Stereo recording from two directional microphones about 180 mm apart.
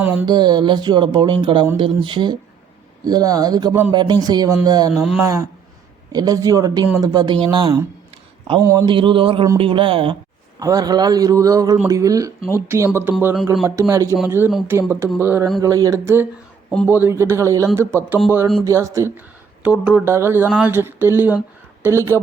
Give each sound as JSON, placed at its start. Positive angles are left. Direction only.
{"t": 0.0, "sound": "music", "side_deg": -10}
{"t": 0.3, "sound": "a man's voice", "side_deg": -25}
{"t": 4.9, "sound": "speech", "side_deg": 0}
{"t": 5.2, "sound": "a man's voice", "side_deg": -15}